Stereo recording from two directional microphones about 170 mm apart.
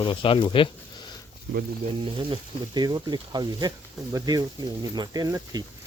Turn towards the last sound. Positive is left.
turn(degrees=-20)  # may be behind; listen again after turning